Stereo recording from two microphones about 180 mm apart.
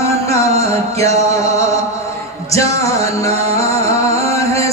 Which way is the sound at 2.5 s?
15° left (ahead or behind).